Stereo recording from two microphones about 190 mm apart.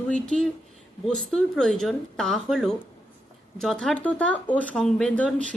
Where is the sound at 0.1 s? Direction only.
5° left (ahead or behind).